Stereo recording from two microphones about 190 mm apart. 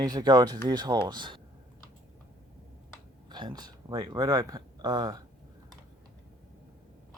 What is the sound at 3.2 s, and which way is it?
Speech, 20° right (ahead or behind).